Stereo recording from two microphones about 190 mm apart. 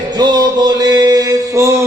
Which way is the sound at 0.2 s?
20° right (ahead or behind).